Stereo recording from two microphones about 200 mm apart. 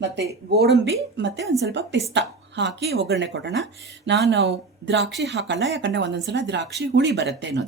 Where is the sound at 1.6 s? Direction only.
60° right (ahead or behind).